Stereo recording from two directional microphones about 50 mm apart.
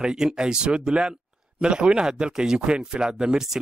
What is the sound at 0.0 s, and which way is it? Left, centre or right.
Speech, centre.